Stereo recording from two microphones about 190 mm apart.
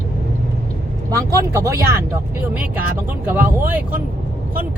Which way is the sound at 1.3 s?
15° right (ahead or behind).